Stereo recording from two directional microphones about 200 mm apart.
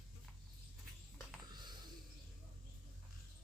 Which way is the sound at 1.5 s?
20° right (ahead or behind).